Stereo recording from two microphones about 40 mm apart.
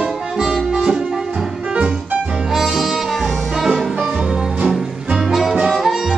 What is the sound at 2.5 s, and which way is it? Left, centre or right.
Saxophone, centre.